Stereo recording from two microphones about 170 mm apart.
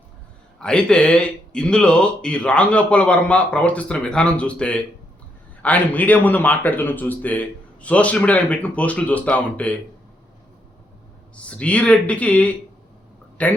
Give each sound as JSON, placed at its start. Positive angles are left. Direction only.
{"t": 0.6, "sound": "speech", "side_deg": 5}
{"t": 11.4, "sound": "speech", "side_deg": 5}